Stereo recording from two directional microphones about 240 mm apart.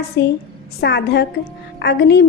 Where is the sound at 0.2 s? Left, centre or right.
Left.